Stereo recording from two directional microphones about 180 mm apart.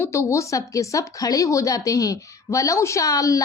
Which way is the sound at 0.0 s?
15° left (ahead or behind).